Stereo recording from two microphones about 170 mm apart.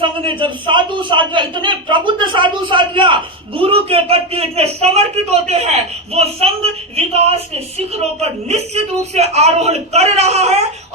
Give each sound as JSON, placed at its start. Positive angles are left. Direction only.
{"t": 0.0, "sound": "a man's voice", "side_deg": -30}